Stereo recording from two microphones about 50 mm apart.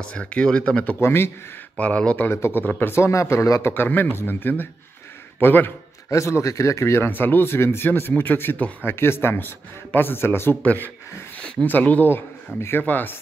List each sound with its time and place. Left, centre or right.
0.0 s speech: left
1.0 s speech: left
1.8 s speech: left
2.2 s speech: left
2.9 s speech: left
3.7 s speech: left
6.0 s speech: left
7.1 s speech: left
8.8 s speech: left
10.6 s speech: left
11.3 s a sound: left
11.6 s speech: left
12.5 s speech: left
12.8 s speech: left